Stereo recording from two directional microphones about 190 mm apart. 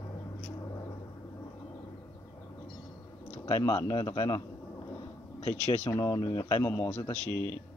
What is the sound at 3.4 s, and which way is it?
A man's voice, 20° left (ahead or behind).